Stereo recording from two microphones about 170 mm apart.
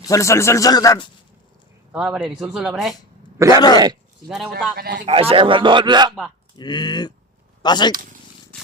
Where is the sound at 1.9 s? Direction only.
5° right (ahead or behind).